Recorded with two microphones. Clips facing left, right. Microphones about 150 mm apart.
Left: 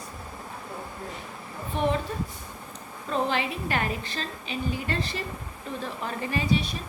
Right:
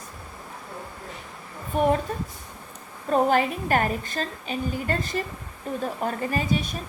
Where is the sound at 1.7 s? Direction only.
45° right (ahead or behind).